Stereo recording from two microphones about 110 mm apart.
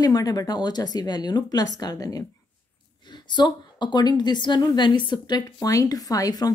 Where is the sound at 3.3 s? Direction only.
45° left (ahead or behind).